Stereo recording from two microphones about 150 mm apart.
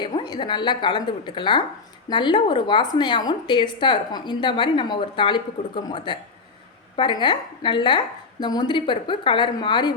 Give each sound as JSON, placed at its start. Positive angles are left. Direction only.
{"t": 0.0, "sound": "a woman's voice", "side_deg": 30}